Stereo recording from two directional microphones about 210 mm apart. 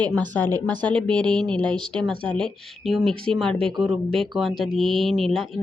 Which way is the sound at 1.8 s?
20° right (ahead or behind).